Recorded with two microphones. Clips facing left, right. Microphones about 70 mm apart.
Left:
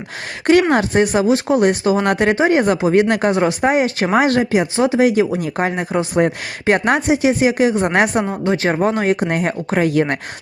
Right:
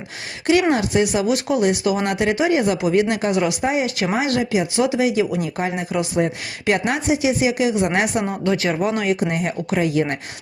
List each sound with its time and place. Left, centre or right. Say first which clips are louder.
0.7 s speech: left 3 dB; left
8.2 s speech: left 3 dB; left
9.2 s speech: left 3 dB; left